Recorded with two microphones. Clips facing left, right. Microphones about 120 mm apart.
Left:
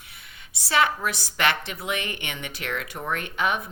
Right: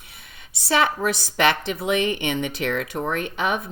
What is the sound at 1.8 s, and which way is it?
Speech, 35° right (ahead or behind).